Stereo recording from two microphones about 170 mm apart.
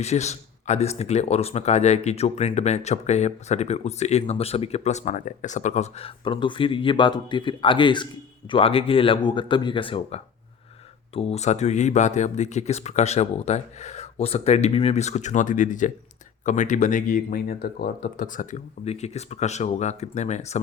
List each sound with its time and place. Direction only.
0.0 s speech: 40° left (ahead or behind)